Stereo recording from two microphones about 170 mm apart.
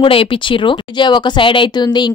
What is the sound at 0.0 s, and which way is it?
Speech, 30° left (ahead or behind).